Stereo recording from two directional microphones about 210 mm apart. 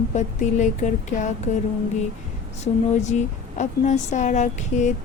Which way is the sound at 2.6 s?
35° left (ahead or behind).